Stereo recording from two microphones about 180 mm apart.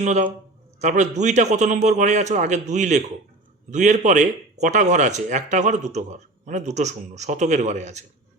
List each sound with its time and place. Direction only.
0.0 s speech: 40° right (ahead or behind)